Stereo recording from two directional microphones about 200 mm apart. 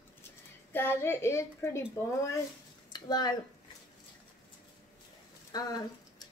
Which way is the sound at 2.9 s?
20° left (ahead or behind).